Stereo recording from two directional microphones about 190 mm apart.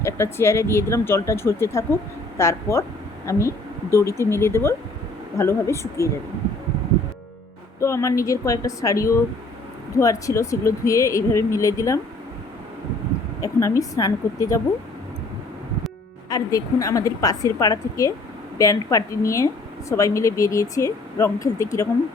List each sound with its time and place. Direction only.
0.0 s speech: 15° left (ahead or behind)
7.8 s speech: 15° left (ahead or behind)
13.4 s speech: 15° left (ahead or behind)
16.3 s speech: 15° left (ahead or behind)